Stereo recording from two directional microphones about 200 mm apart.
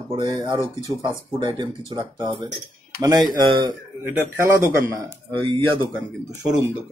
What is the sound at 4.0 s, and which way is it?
Speech, 10° right (ahead or behind).